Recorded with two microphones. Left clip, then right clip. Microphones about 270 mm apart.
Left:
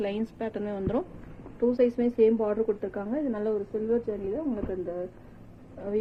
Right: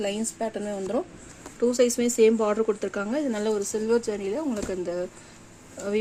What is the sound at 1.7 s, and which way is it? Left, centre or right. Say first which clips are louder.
Speech: right 2 dB; right.